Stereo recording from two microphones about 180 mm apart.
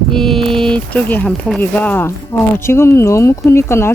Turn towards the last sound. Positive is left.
turn(degrees=15)  # may be behind; listen again after turning